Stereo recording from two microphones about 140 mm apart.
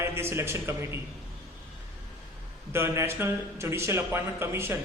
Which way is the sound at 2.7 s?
20° right (ahead or behind).